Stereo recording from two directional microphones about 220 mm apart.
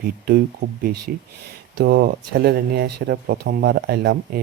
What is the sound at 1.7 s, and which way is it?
Speech, 45° right (ahead or behind).